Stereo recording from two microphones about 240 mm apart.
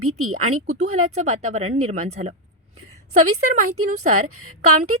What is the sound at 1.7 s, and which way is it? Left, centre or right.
Speech, right.